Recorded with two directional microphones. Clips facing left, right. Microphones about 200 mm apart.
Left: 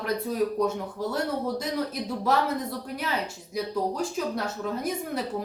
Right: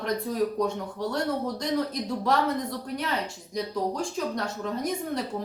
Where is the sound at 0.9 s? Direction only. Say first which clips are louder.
Even; 5° left (ahead or behind).